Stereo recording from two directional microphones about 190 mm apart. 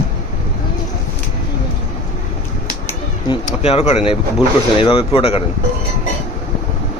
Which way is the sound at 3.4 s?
30° left (ahead or behind).